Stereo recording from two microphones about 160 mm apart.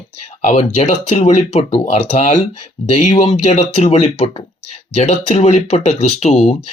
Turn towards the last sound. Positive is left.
turn(degrees=40)  # may be behind; listen again after turning